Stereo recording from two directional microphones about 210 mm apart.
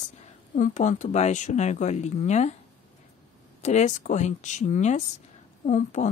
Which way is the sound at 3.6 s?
35° left (ahead or behind).